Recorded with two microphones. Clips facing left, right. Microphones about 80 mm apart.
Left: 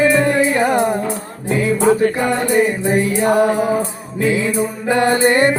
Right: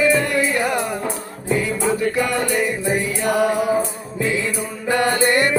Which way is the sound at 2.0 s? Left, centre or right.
Left.